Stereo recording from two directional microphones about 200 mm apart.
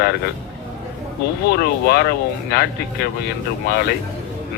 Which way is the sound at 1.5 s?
55° left (ahead or behind).